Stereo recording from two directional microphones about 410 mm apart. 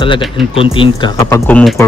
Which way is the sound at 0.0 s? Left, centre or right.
Centre.